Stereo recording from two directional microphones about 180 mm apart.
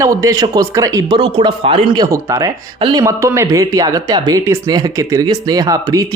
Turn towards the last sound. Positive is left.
turn(degrees=-20)  # may be behind; listen again after turning